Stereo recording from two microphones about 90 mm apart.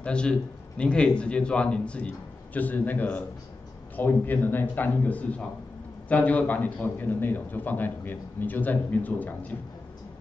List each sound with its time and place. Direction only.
0.0 s a man's voice: 10° left (ahead or behind)